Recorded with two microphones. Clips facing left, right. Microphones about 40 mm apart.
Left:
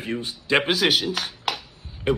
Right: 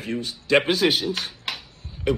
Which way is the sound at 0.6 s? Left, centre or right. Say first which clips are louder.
Even; left.